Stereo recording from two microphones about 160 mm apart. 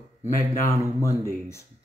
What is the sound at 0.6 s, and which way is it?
A man's voice, 15° left (ahead or behind).